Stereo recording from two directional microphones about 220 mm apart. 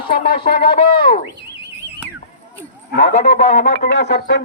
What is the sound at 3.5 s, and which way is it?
Speech, 50° left (ahead or behind).